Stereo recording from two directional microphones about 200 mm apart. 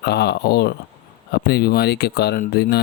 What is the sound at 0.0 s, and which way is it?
Speech, 55° left (ahead or behind).